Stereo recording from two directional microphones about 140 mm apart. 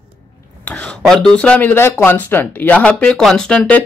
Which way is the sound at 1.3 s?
10° left (ahead or behind).